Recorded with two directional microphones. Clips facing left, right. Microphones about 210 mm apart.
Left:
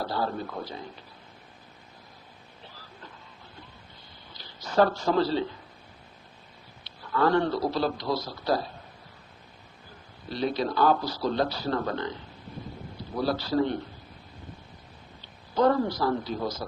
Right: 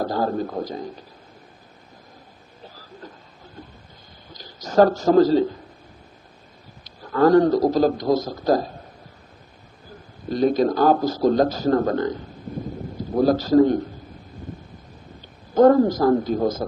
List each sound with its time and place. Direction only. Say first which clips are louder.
0.0 s a man's voice: right 7 dB; 45° right (ahead or behind)
2.6 s a sound: right 8 dB; 40° right (ahead or behind)
4.3 s a man's voice: right 6 dB; 45° right (ahead or behind)
6.8 s a man's voice: right 8 dB; 45° right (ahead or behind)
10.2 s a man's voice: right 9 dB; 45° right (ahead or behind)
15.5 s a man's voice: right 9 dB; 45° right (ahead or behind)